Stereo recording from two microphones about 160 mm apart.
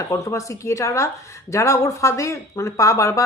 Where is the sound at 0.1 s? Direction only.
20° left (ahead or behind).